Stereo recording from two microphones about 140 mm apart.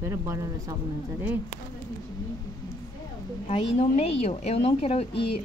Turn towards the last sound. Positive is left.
turn(degrees=40)  # may be behind; listen again after turning